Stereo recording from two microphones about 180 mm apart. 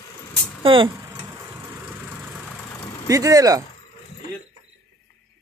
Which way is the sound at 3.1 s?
20° right (ahead or behind).